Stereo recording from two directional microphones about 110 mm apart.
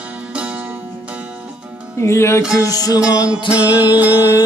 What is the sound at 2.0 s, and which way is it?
Music, 25° left (ahead or behind).